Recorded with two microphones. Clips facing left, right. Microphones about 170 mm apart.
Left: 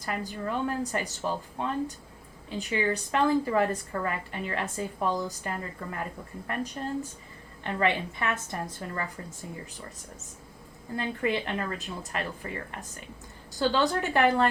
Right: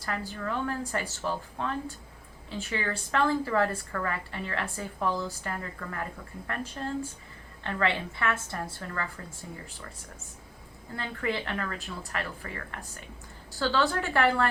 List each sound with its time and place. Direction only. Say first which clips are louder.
0.0 s a woman's voice: left 1 dB; 20° left (ahead or behind)
10.9 s a woman's voice: left 3 dB; 20° left (ahead or behind)